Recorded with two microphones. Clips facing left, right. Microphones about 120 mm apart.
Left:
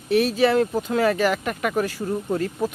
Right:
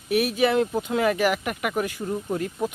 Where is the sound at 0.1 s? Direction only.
15° right (ahead or behind).